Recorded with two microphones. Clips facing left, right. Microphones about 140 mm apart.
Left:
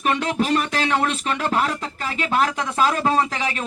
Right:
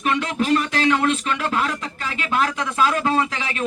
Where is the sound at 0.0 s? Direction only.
35° left (ahead or behind).